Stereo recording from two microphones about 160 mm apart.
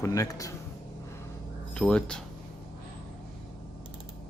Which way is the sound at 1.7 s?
5° left (ahead or behind).